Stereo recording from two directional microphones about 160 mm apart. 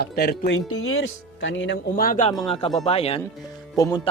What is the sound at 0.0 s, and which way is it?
Speech, 80° left.